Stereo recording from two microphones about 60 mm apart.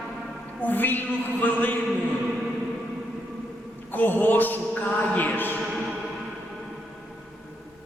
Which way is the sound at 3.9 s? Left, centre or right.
Left.